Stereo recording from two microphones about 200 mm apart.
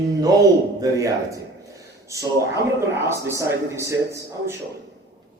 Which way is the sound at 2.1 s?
15° right (ahead or behind).